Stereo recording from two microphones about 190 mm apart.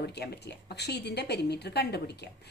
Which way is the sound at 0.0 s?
60° left (ahead or behind).